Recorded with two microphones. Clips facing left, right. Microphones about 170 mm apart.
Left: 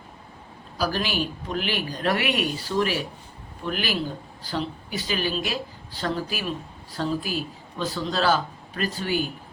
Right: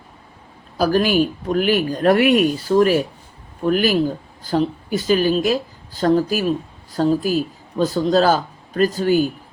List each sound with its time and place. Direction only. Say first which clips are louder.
0.8 s a man's voice: right 10 dB; 45° right (ahead or behind)